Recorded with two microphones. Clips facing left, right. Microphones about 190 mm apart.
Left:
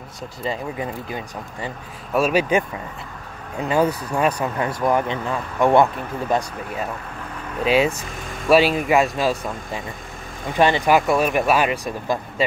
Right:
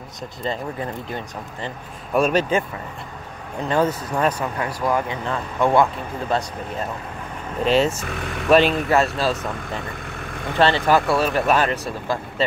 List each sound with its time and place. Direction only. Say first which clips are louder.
0.4 s speech: even; 5° left (ahead or behind)
4.6 s speech: left 2 dB; 25° left (ahead or behind)
7.6 s speech: even; 10° left (ahead or behind)
8.0 s speech: right 4 dB; 65° right (ahead or behind)
8.5 s speech: even; 10° left (ahead or behind)
10.6 s speech: left 1 dB; 15° left (ahead or behind)